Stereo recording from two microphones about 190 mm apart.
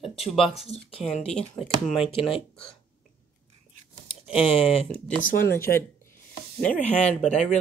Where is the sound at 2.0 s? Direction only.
30° left (ahead or behind).